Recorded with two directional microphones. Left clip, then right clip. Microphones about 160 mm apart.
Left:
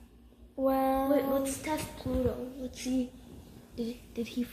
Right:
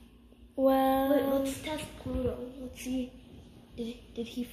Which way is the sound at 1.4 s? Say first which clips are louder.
Left 1 dB; 15° left (ahead or behind).